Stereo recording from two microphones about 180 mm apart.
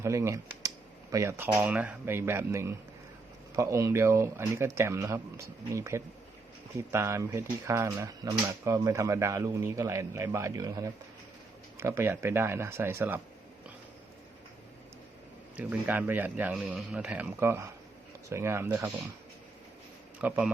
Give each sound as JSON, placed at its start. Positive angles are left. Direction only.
{"t": 0.0, "sound": "speech", "side_deg": -15}
{"t": 15.5, "sound": "speech", "side_deg": -10}
{"t": 20.2, "sound": "speech", "side_deg": -10}